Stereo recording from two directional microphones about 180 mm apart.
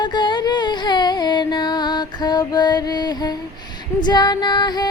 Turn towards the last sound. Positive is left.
turn(degrees=25)  # may be behind; listen again after turning